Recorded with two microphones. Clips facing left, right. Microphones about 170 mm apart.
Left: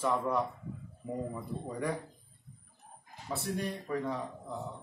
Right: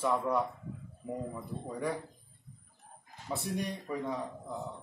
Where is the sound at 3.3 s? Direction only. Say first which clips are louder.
Even; 15° right (ahead or behind).